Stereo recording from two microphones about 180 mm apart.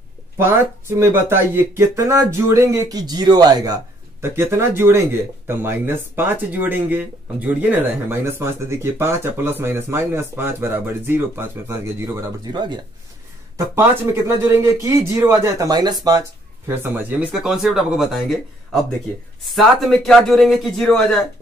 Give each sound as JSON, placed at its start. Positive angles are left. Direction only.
{"t": 0.4, "sound": "speech", "side_deg": -15}
{"t": 13.7, "sound": "a man's voice", "side_deg": -15}